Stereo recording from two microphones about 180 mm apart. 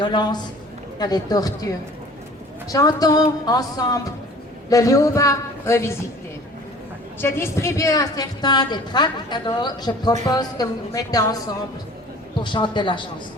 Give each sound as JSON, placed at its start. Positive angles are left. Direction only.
{"t": 0.0, "sound": "a woman's voice", "side_deg": 25}
{"t": 7.2, "sound": "a woman's voice", "side_deg": 15}